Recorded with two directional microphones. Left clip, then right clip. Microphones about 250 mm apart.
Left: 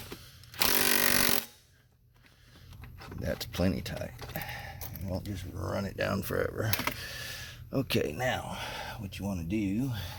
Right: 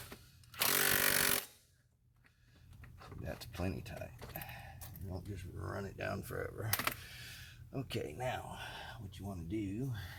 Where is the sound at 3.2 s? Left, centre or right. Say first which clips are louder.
Left 11 dB; left.